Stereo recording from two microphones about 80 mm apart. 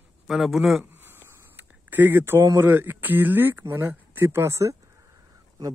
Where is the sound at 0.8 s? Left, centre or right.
Right.